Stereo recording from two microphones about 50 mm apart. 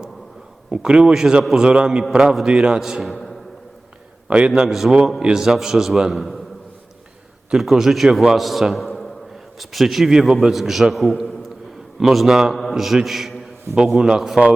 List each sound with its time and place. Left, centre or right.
0.7 s a man's voice: centre
3.0 s a sound: centre
4.3 s a man's voice: right
4.6 s a man's voice: centre
7.5 s a man's voice: centre